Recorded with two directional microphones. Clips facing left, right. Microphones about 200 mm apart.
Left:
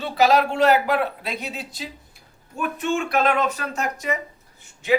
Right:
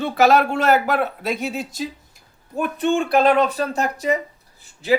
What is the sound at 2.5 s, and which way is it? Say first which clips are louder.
Speech: right 4 dB; 35° right (ahead or behind).